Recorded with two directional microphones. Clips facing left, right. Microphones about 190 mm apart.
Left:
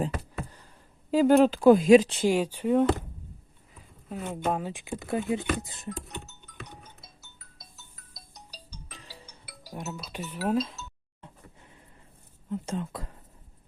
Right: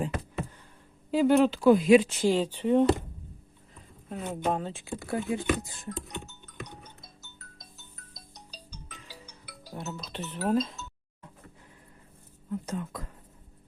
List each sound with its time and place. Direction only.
1.1 s speech: 45° left (ahead or behind)
2.2 s speech: 10° left (ahead or behind)
9.5 s speech: 10° left (ahead or behind)
12.5 s speech: 25° left (ahead or behind)